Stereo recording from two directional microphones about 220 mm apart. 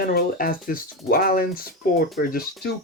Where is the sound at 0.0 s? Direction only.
40° left (ahead or behind).